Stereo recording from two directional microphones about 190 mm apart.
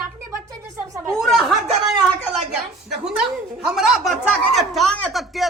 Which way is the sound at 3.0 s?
5° right (ahead or behind).